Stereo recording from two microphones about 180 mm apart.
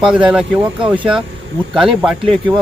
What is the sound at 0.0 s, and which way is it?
Speech, 5° right (ahead or behind).